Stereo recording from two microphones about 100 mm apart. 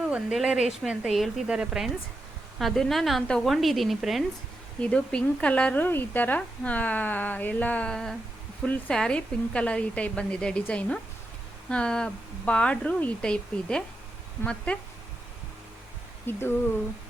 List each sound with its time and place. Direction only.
0.1 s a woman's voice: 5° right (ahead or behind)
4.8 s speech: 10° left (ahead or behind)
16.2 s speech: 20° left (ahead or behind)